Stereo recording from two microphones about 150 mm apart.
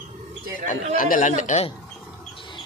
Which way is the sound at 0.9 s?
65° left (ahead or behind).